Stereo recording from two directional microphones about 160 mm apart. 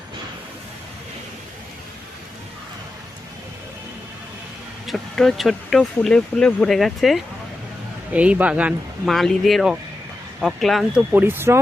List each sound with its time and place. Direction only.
4.9 s speech: centre (ahead or behind)
11.1 s speech: 10° right (ahead or behind)